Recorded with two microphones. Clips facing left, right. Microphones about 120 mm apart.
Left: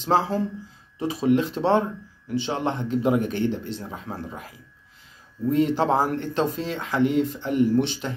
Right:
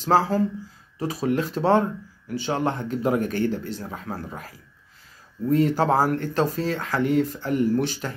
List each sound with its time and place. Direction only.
0.0 s speech: 20° left (ahead or behind)
5.5 s speech: 20° left (ahead or behind)